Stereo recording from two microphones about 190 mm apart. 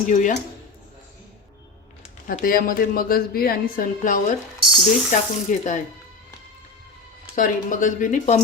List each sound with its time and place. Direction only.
0.1 s speech: 40° left (ahead or behind)
2.2 s a woman's voice: 45° left (ahead or behind)
4.6 s speech: centre (ahead or behind)
5.1 s speech: 40° left (ahead or behind)
7.3 s a woman's voice: 45° left (ahead or behind)